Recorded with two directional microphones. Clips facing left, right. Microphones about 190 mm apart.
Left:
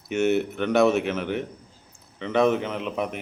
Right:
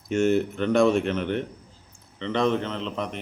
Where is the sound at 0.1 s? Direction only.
5° left (ahead or behind).